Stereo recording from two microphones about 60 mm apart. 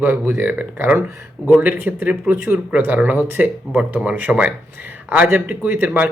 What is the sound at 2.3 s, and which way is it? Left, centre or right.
Speech, right.